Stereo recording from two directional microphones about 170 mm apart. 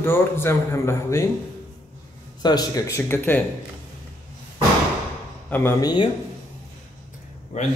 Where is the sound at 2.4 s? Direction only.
25° left (ahead or behind).